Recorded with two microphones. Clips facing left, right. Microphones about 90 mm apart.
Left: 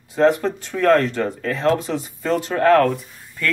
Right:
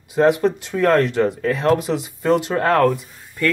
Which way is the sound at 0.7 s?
5° right (ahead or behind).